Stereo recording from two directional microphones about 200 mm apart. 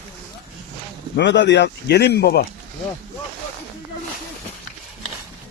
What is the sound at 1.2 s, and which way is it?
Speech, 65° left (ahead or behind).